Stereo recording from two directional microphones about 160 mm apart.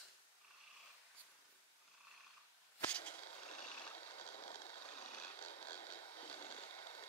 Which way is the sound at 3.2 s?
45° left (ahead or behind).